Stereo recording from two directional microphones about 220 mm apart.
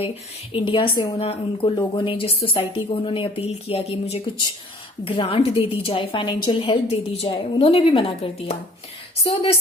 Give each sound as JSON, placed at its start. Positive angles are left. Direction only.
{"t": 0.5, "sound": "a woman's voice", "side_deg": 25}